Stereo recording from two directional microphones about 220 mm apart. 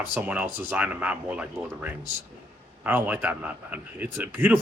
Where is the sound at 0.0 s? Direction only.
5° right (ahead or behind).